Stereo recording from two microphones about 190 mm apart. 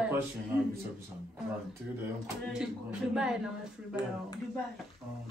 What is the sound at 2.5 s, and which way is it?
Speech, 5° right (ahead or behind).